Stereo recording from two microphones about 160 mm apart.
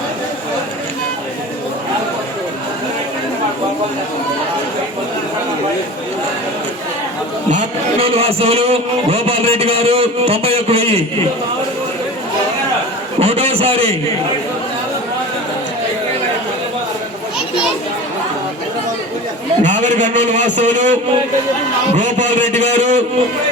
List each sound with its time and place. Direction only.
7.5 s a man's voice: 35° right (ahead or behind)
13.1 s a man's voice: 40° right (ahead or behind)
19.6 s a man's voice: 50° right (ahead or behind)